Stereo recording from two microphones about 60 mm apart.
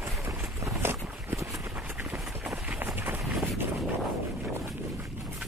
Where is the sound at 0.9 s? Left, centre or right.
Centre.